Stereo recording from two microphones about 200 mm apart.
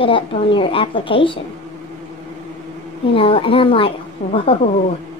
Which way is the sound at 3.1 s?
25° left (ahead or behind).